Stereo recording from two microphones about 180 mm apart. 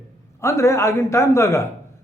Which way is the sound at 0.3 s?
15° left (ahead or behind).